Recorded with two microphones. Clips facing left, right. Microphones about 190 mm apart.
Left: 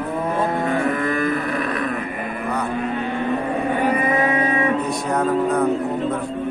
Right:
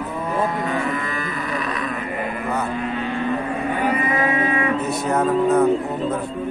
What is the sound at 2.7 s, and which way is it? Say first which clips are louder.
Cattle: left 1 dB; 50° left (ahead or behind).